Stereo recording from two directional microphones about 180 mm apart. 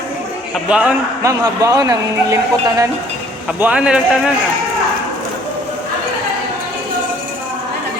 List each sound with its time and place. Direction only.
0.7 s a man's voice: 5° right (ahead or behind)
1.2 s speech: 20° right (ahead or behind)
3.6 s a man's voice: 5° right (ahead or behind)